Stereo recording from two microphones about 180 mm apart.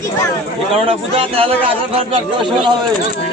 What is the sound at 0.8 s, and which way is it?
A man's voice, 30° right (ahead or behind).